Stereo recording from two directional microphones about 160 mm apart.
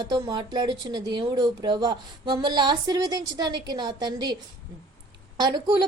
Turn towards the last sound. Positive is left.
turn(degrees=-25)  # may be behind; listen again after turning